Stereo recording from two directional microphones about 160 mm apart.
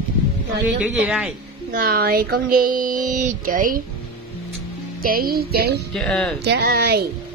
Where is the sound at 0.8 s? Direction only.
10° right (ahead or behind).